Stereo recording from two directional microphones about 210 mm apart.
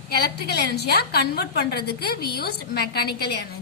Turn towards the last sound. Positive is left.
turn(degrees=50)  # may be behind; listen again after turning